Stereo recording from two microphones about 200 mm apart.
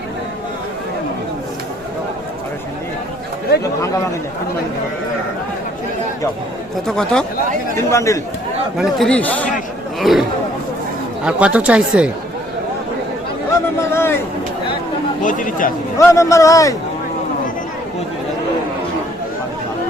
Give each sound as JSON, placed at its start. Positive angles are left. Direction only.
{"t": 6.8, "sound": "speech", "side_deg": 0}
{"t": 7.8, "sound": "a man's voice", "side_deg": 15}
{"t": 8.8, "sound": "a man's voice", "side_deg": 0}
{"t": 11.3, "sound": "speech", "side_deg": -5}
{"t": 13.9, "sound": "a man's voice", "side_deg": 10}
{"t": 15.2, "sound": "speech", "side_deg": 40}
{"t": 16.0, "sound": "a man's voice", "side_deg": 15}